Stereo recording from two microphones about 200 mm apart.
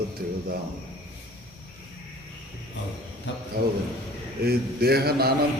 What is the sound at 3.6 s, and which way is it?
A man's voice, 50° right (ahead or behind).